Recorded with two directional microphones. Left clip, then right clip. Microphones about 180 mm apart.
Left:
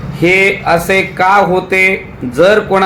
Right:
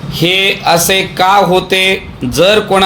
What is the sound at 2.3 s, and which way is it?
Speech, 30° right (ahead or behind).